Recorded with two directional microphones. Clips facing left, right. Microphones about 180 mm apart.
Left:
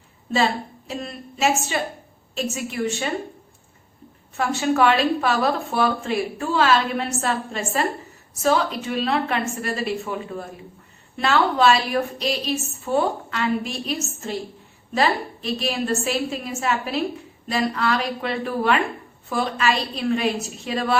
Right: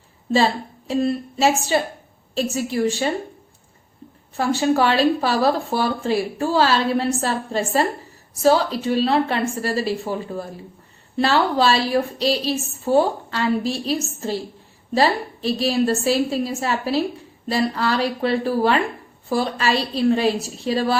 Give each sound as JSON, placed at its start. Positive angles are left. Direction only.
{"t": 0.3, "sound": "a woman's voice", "side_deg": -30}
{"t": 4.4, "sound": "a woman's voice", "side_deg": -35}